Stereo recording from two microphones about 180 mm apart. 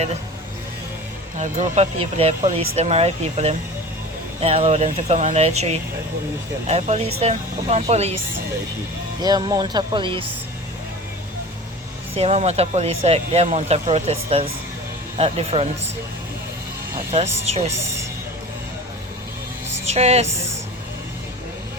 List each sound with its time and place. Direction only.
1.4 s speech: 40° right (ahead or behind)
9.2 s speech: 20° right (ahead or behind)
12.1 s speech: 35° right (ahead or behind)
17.1 s speech: 35° right (ahead or behind)
19.9 s speech: 35° right (ahead or behind)